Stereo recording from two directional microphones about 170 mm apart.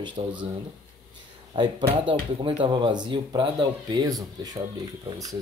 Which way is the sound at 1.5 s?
25° right (ahead or behind).